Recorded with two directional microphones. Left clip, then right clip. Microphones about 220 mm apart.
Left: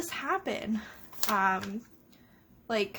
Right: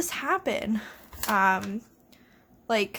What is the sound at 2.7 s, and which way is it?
Speech, 20° right (ahead or behind).